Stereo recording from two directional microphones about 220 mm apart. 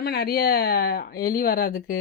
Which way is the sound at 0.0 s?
45° left (ahead or behind).